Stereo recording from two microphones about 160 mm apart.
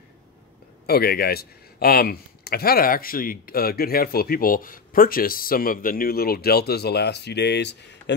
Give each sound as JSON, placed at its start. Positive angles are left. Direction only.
{"t": 0.8, "sound": "speech", "side_deg": 75}